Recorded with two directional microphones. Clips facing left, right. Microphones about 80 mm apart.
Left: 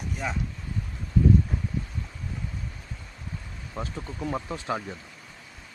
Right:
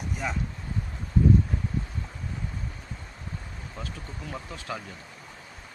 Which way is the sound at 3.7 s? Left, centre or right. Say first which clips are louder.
Left 6 dB; left.